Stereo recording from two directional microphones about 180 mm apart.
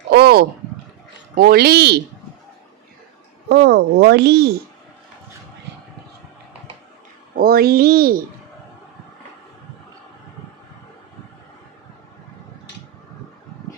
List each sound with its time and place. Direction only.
0.1 s speech: 60° right (ahead or behind)
3.5 s speech: 65° right (ahead or behind)
7.3 s speech: 55° right (ahead or behind)